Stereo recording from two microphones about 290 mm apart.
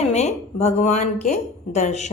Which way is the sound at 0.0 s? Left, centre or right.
Left.